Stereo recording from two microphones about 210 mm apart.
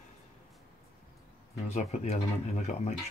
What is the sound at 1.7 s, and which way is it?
Speech, 35° left (ahead or behind).